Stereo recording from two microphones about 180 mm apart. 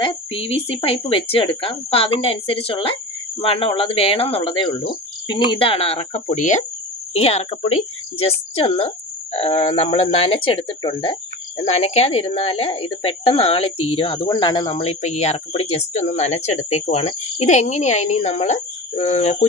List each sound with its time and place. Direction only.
0.0 s speech: 30° left (ahead or behind)